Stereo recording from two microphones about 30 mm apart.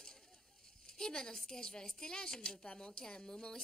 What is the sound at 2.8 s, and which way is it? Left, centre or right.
Speech, left.